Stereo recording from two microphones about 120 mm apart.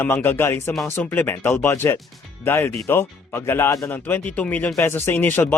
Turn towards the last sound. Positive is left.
turn(degrees=15)  # may be behind; listen again after turning